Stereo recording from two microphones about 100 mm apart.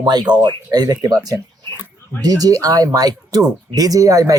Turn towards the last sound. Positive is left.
turn(degrees=-35)  # may be behind; listen again after turning